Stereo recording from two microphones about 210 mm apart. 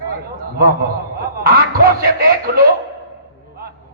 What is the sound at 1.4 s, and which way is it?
Speech, 45° right (ahead or behind).